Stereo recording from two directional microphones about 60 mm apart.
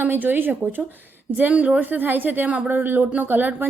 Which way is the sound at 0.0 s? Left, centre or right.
Right.